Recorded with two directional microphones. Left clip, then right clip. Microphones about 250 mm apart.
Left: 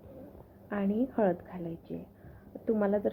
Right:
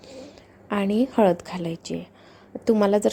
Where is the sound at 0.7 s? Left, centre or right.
Right.